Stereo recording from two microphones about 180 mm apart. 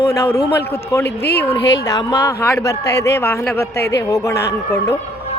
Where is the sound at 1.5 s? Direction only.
75° left (ahead or behind).